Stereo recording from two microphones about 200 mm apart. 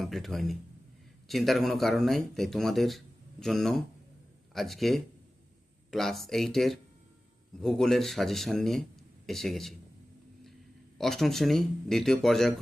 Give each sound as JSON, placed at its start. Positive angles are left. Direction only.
{"t": 0.0, "sound": "speech", "side_deg": 0}
{"t": 10.9, "sound": "speech", "side_deg": 0}